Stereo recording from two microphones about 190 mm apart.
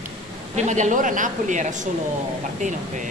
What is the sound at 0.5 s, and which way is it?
Speech, 40° right (ahead or behind).